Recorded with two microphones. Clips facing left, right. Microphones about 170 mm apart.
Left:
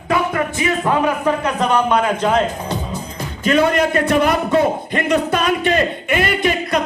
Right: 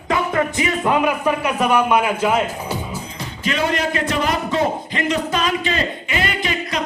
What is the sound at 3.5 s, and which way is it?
A man's voice, 50° left (ahead or behind).